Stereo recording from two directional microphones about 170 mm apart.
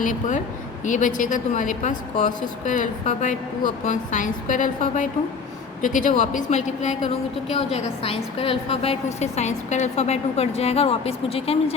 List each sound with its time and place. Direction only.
0.0 s a woman's voice: 50° left (ahead or behind)